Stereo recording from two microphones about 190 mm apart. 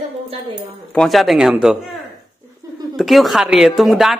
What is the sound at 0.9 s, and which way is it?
A man's voice, centre (ahead or behind).